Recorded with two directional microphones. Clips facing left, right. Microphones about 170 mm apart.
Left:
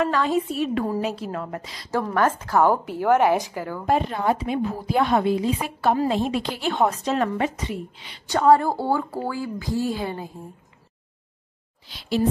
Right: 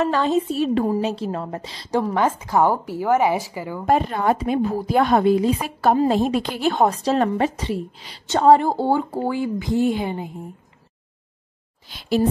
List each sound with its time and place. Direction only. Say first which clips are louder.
0.0 s a woman's voice: right 2 dB; 25° right (ahead or behind)
2.1 s a woman's voice: left 1 dB; 10° right (ahead or behind)
3.8 s a woman's voice: right 3 dB; 50° right (ahead or behind)
8.3 s a woman's voice: right 2 dB; 25° right (ahead or behind)
11.9 s a woman's voice: right 4 dB; 50° right (ahead or behind)